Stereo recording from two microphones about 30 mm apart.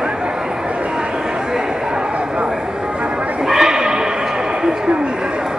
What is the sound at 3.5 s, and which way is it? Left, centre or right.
Horse, centre.